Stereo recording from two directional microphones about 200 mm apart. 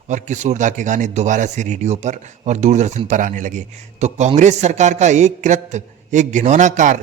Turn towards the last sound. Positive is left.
turn(degrees=-40)  # may be behind; listen again after turning